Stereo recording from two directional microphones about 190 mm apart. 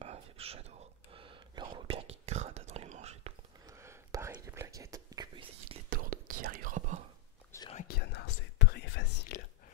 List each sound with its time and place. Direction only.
0.0 s whispering: 30° right (ahead or behind)
3.6 s whispering: 15° right (ahead or behind)
5.9 s whispering: 45° right (ahead or behind)
7.5 s whispering: 15° left (ahead or behind)
7.9 s whispering: 60° left (ahead or behind)